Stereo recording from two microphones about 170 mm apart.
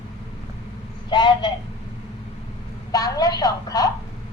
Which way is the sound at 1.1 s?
25° left (ahead or behind).